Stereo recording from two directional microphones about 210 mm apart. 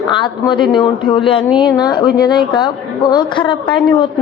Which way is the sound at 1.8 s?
20° left (ahead or behind).